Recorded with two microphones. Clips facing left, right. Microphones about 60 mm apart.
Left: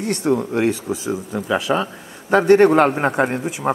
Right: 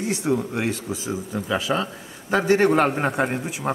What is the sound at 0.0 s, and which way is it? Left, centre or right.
A man's voice, centre.